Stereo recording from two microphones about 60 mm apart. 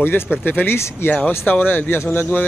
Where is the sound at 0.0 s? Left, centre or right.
Left.